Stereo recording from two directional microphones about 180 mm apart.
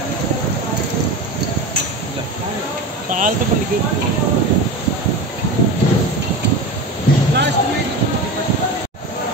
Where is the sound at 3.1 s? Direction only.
45° right (ahead or behind).